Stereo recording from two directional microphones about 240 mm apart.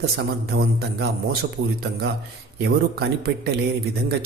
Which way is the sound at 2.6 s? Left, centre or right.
Right.